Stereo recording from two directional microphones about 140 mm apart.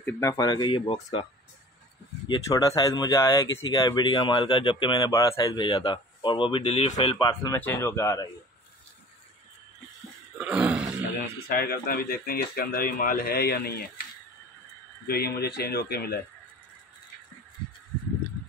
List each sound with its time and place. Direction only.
0.0 s speech: 20° left (ahead or behind)
2.4 s speech: 25° left (ahead or behind); by 7.2 s 45° left (ahead or behind)
7.2 s speech: 25° left (ahead or behind)
10.3 s a sound: 10° right (ahead or behind)
11.4 s speech: 90° left
15.0 s speech: 90° left